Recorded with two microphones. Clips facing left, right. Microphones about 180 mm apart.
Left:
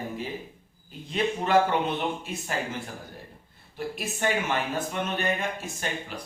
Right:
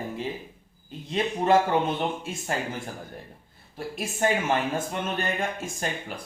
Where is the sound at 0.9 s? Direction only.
30° right (ahead or behind).